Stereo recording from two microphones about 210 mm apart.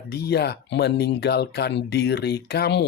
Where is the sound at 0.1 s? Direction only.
50° left (ahead or behind).